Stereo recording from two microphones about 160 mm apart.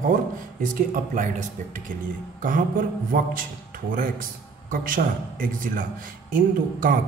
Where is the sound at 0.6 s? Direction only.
55° right (ahead or behind).